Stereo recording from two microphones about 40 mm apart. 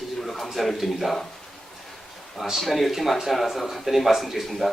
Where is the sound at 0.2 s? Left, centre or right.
Centre.